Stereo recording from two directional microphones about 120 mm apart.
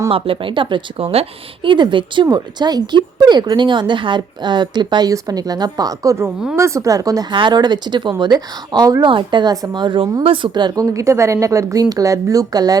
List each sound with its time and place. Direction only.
0.1 s a woman's voice: 50° right (ahead or behind); by 12.7 s 30° right (ahead or behind)